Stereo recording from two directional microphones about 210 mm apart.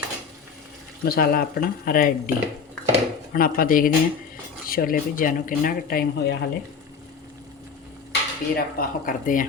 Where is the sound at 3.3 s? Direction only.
45° left (ahead or behind).